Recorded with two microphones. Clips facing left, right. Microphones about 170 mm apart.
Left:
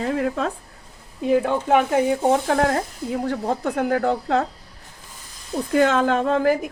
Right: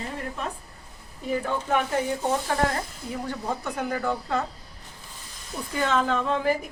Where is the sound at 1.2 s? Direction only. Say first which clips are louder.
Left 8 dB; 70° left (ahead or behind).